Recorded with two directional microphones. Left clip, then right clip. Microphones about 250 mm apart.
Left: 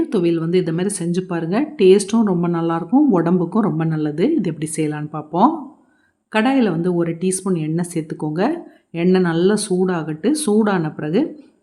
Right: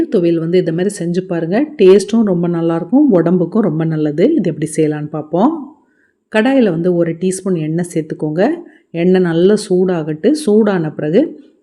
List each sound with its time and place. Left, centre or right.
0.0 s speech: centre